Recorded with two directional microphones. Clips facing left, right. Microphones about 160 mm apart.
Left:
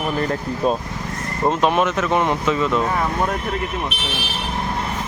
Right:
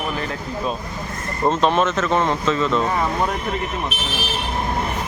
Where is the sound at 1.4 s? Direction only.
10° left (ahead or behind).